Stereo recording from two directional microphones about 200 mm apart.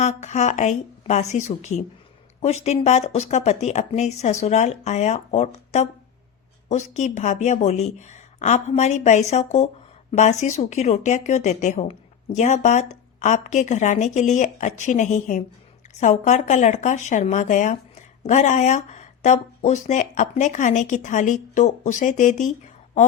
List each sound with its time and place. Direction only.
0.0 s speech: 35° left (ahead or behind)